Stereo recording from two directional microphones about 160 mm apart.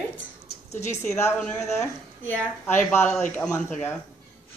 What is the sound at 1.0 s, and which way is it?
Speech, 15° left (ahead or behind).